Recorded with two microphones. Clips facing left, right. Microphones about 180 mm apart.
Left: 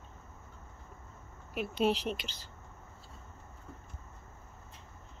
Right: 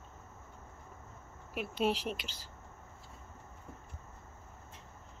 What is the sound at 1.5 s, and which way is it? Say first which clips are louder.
Speech: left 2 dB; 5° right (ahead or behind).